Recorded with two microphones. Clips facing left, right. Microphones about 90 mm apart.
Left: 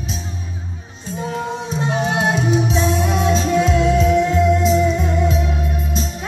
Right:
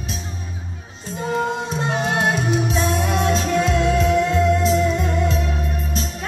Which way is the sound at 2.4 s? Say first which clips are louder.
Left 3 dB; 5° right (ahead or behind).